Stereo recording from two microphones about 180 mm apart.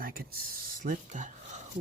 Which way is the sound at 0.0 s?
55° right (ahead or behind).